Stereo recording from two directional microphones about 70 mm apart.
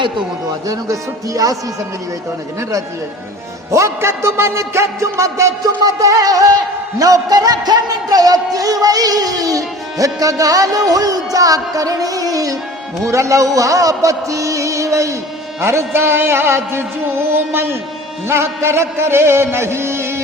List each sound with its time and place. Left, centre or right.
0.7 s speech: right
3.7 s music: right
7.0 s a man's voice: right
15.6 s music: right